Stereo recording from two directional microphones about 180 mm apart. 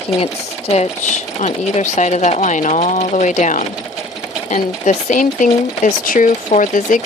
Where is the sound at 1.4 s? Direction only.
40° left (ahead or behind).